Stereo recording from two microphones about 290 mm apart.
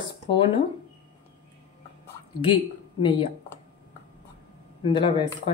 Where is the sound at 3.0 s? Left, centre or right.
Centre.